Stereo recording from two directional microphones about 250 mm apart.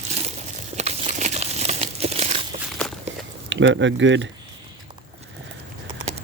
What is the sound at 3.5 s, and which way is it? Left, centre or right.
Speech, right.